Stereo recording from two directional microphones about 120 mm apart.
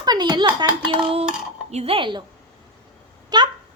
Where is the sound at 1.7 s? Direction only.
50° right (ahead or behind).